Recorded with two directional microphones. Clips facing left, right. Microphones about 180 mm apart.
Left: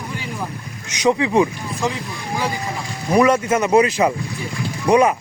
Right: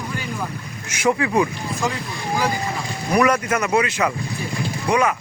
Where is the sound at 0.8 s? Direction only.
20° left (ahead or behind).